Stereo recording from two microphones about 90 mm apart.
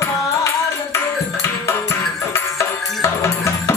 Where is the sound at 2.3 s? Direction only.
30° left (ahead or behind).